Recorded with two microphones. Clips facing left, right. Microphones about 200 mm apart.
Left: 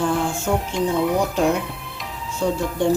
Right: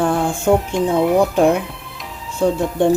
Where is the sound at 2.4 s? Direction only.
55° right (ahead or behind).